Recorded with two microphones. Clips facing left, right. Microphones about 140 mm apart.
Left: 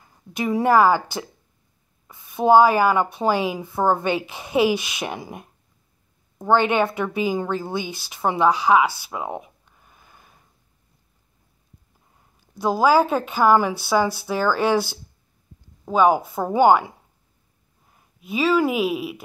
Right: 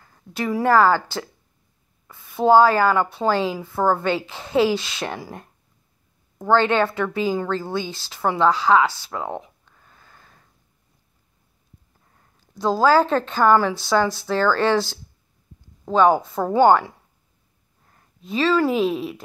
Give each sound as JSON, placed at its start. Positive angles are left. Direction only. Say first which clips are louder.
{"t": 0.0, "sound": "a woman's voice", "louder": "left 1 dB", "side_deg": 15}
{"t": 12.2, "sound": "a woman's voice", "louder": "right 1 dB", "side_deg": 15}